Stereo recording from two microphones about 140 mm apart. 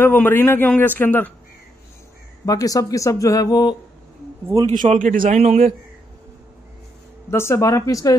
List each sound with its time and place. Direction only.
0.0 s a man's voice: 15° left (ahead or behind)
2.4 s speech: 25° left (ahead or behind)
4.6 s speech: 65° right (ahead or behind)
5.3 s a man's voice: 50° right (ahead or behind)
7.2 s speech: 20° left (ahead or behind)